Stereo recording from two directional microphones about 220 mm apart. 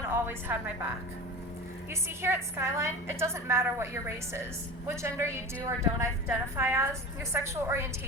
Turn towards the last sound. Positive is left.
turn(degrees=-10)  # may be behind; listen again after turning